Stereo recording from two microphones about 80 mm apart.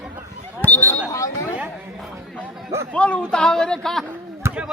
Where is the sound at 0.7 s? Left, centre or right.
Left.